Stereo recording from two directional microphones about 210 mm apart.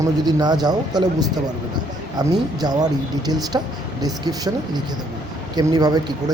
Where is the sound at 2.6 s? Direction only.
20° right (ahead or behind).